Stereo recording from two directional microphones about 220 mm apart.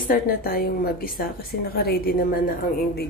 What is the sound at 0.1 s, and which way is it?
A woman's voice, 40° left (ahead or behind).